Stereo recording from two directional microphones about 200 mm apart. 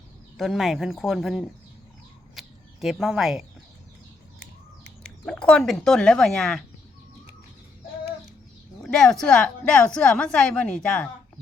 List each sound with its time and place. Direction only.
0.3 s a woman's voice: centre (ahead or behind)
2.4 s a sound: centre (ahead or behind)
2.8 s a woman's voice: centre (ahead or behind)
5.0 s a woman's voice: 5° left (ahead or behind)
8.8 s a woman's voice: centre (ahead or behind)